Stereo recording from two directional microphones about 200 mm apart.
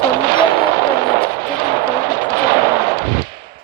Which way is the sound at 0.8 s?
20° right (ahead or behind).